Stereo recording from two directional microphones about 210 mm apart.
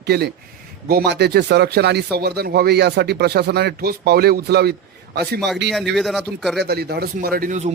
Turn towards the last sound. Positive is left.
turn(degrees=-35)  # may be behind; listen again after turning